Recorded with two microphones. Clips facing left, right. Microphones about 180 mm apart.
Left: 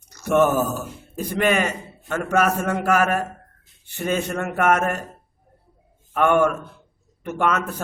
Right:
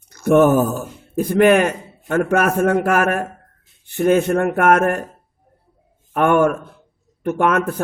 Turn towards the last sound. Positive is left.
turn(degrees=-55)  # may be behind; listen again after turning